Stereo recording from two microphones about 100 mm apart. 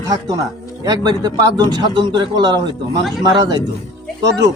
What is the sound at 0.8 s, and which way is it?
Speech, 40° right (ahead or behind).